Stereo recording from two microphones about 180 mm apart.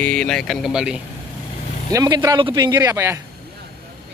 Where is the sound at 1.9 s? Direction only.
20° right (ahead or behind).